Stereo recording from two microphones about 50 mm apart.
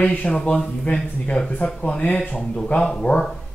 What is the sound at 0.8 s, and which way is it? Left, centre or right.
A man's voice, left.